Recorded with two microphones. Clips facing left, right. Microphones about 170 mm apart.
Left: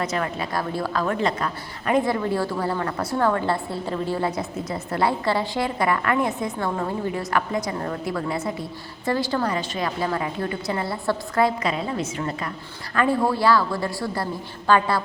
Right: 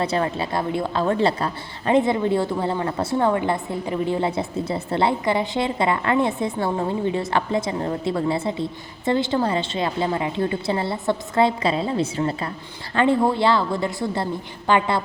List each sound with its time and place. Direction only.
0.0 s a woman's voice: 30° right (ahead or behind)